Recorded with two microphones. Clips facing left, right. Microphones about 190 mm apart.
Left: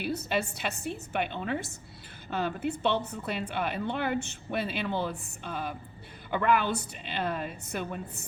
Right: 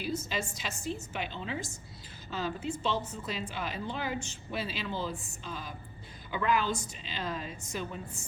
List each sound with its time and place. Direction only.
0.0 s speech: 60° left (ahead or behind)